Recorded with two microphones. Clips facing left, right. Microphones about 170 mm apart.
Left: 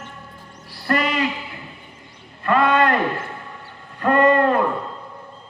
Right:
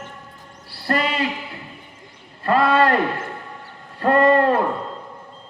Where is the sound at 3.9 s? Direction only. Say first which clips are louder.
Right 1 dB; 30° right (ahead or behind).